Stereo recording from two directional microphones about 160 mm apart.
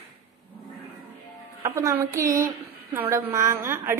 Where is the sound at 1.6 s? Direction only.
20° right (ahead or behind).